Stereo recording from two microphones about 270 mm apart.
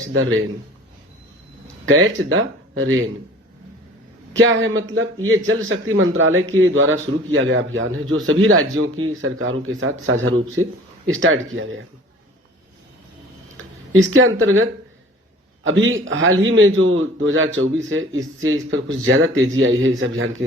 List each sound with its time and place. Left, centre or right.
0.1 s speech: right
1.9 s speech: right
4.4 s speech: right
13.6 s a sound: right
13.9 s speech: right